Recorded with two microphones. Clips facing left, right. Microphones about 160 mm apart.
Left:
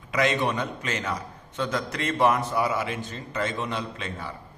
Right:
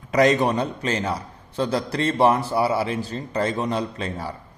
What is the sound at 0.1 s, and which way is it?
A man's voice, 40° right (ahead or behind).